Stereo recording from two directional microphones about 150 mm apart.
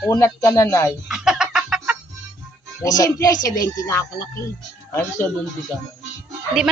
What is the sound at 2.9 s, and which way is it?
Speech, 25° left (ahead or behind).